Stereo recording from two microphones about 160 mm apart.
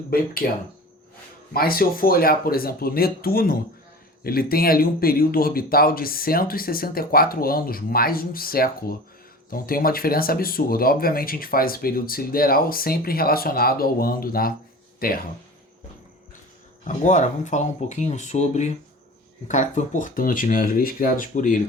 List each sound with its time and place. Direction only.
0.1 s speech: 70° left (ahead or behind)
1.5 s speech: 65° left (ahead or behind)
16.8 s speech: 50° left (ahead or behind)